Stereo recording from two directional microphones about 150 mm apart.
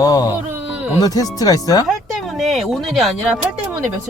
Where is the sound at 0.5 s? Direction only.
10° right (ahead or behind).